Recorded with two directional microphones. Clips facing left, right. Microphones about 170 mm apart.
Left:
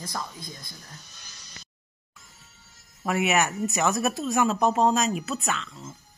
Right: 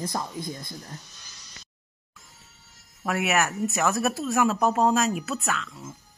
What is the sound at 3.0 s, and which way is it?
Speech, centre (ahead or behind).